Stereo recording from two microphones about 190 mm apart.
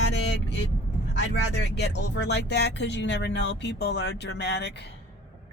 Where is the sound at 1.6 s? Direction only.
65° left (ahead or behind).